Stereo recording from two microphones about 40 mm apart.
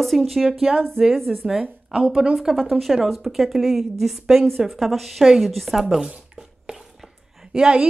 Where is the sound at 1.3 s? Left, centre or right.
Right.